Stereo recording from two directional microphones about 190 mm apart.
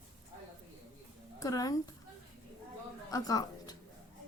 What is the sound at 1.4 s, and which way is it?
Speech, 20° left (ahead or behind).